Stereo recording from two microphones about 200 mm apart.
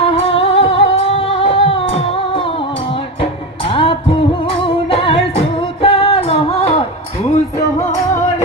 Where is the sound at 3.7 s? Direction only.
25° left (ahead or behind).